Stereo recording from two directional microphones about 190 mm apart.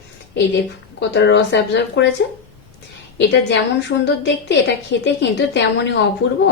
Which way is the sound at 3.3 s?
65° left (ahead or behind).